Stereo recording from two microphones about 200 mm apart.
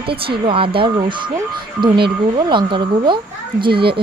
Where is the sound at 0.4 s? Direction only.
25° right (ahead or behind).